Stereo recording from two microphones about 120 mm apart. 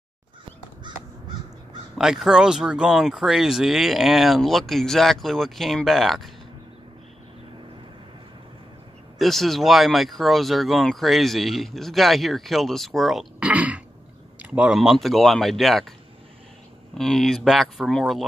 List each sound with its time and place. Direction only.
0.9 s crow: 40° right (ahead or behind)
2.0 s speech: 5° right (ahead or behind)
9.2 s speech: centre (ahead or behind)
16.9 s speech: centre (ahead or behind)